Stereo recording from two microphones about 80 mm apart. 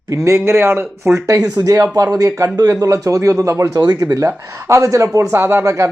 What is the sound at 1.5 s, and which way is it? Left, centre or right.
Speech, right.